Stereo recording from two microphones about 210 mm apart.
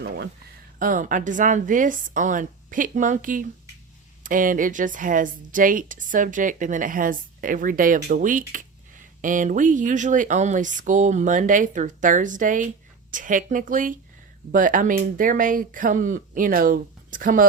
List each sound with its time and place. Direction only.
0.8 s speech: 40° right (ahead or behind)